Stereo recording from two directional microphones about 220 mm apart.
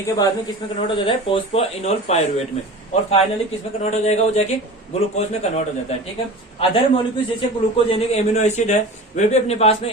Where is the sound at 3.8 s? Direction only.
30° left (ahead or behind).